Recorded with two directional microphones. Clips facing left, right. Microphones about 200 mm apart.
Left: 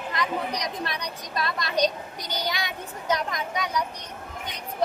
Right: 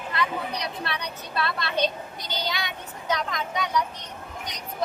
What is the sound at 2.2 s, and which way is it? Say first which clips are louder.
Speech: left 1 dB; 20° right (ahead or behind).